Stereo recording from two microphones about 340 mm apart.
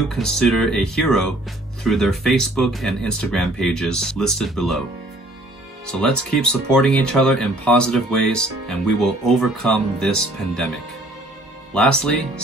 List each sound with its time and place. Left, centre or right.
0.1 s speech: centre
5.9 s speech: centre
11.7 s speech: centre